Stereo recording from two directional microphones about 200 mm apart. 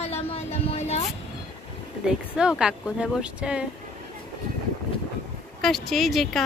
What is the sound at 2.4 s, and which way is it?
Speech, 5° right (ahead or behind).